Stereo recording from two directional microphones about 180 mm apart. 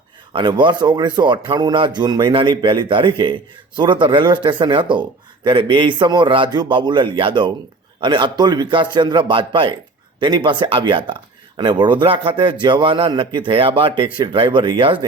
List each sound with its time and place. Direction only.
0.3 s speech: 25° right (ahead or behind)